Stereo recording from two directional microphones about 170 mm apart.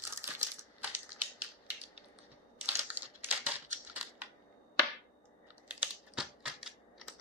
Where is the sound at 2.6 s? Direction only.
10° right (ahead or behind).